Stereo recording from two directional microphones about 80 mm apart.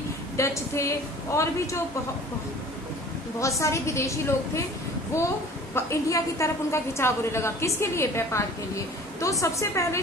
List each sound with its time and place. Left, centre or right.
0.4 s a woman's voice: left
3.3 s a woman's voice: left